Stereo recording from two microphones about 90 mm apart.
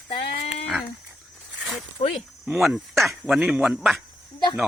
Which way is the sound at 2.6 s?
Centre (ahead or behind).